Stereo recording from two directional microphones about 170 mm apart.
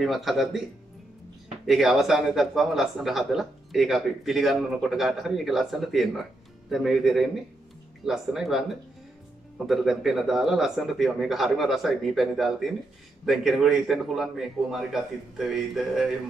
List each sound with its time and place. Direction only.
0.0 s a man's voice: centre (ahead or behind)
1.7 s a man's voice: centre (ahead or behind)
9.7 s a man's voice: centre (ahead or behind)